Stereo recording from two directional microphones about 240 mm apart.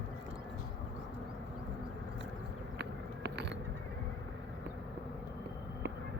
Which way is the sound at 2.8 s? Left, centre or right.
Right.